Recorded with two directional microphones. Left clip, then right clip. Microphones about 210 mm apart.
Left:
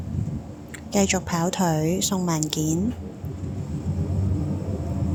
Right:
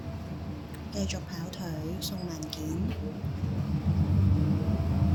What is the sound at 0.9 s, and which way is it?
A woman's voice, 40° left (ahead or behind).